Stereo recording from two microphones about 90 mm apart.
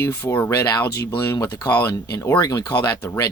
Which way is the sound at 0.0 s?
35° left (ahead or behind).